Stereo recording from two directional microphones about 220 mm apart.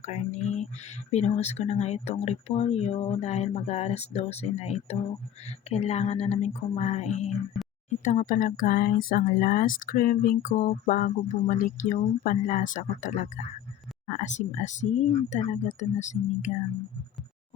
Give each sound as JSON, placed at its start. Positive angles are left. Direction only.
{"t": 0.0, "sound": "speech", "side_deg": 30}